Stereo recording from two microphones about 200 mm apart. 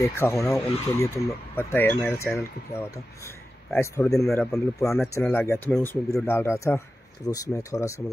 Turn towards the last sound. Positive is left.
turn(degrees=15)  # may be behind; listen again after turning